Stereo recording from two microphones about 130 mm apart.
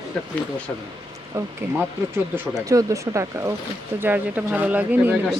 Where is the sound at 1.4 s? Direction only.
20° right (ahead or behind).